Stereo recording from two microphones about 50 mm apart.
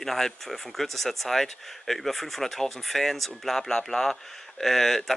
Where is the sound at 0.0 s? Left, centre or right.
Centre.